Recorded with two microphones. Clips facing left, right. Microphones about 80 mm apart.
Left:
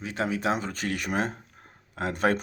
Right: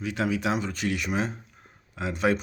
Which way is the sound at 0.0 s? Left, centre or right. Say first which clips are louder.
Right 1 dB; left.